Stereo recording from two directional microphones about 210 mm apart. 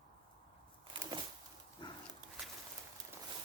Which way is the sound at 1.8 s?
20° left (ahead or behind).